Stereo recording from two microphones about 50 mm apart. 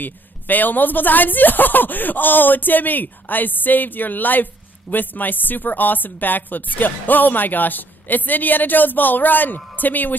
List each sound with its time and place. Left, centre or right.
0.0 s speech: left